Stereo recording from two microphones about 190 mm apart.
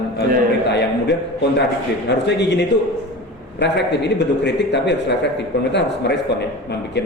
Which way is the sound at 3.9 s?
65° left (ahead or behind).